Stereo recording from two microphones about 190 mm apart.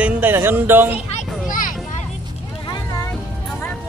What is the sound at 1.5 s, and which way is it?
Children playing, 45° left (ahead or behind).